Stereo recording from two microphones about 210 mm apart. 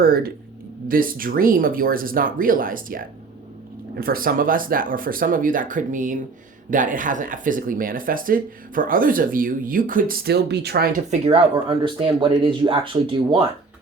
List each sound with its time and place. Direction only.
0.0 s speech: 45° right (ahead or behind)
11.1 s speech: 30° right (ahead or behind)